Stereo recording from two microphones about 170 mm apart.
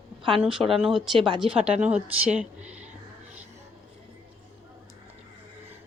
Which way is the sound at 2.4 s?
10° right (ahead or behind).